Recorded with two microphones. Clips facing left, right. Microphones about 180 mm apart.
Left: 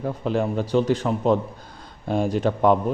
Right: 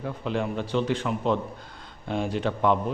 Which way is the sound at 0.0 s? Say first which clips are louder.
Left 5 dB; 40° left (ahead or behind).